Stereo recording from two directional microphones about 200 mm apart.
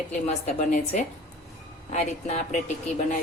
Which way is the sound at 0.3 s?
35° left (ahead or behind).